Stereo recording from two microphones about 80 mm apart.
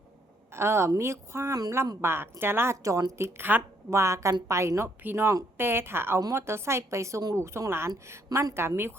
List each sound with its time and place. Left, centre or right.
0.5 s a woman's voice: right
2.8 s a woman's voice: right
3.8 s a woman's voice: right